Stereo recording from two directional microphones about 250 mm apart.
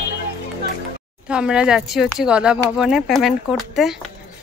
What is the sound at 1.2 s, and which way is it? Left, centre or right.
Speech, centre.